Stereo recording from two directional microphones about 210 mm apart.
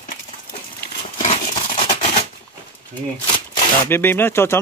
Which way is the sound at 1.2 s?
30° left (ahead or behind).